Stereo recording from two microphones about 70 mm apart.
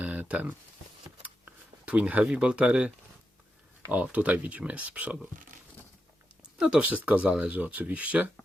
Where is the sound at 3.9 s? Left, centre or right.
Right.